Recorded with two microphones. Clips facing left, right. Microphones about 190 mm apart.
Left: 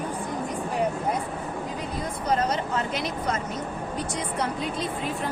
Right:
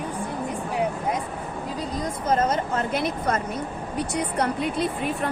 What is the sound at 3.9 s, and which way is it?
Speech, 65° right (ahead or behind).